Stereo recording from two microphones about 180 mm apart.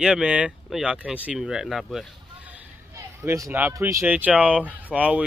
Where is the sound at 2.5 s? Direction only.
15° right (ahead or behind).